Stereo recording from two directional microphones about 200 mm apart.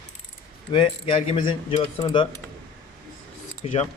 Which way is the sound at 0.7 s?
25° left (ahead or behind).